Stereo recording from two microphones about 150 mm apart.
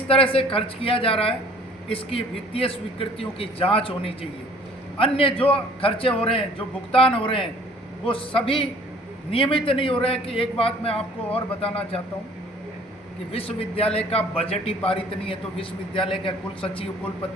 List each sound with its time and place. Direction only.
0.1 s a man's voice: 40° left (ahead or behind)
13.3 s a man's voice: 40° left (ahead or behind)